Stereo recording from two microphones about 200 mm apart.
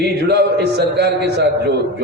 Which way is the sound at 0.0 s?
55° right (ahead or behind).